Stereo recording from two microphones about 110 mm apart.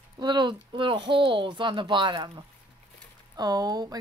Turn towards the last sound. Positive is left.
turn(degrees=-35)  # may be behind; listen again after turning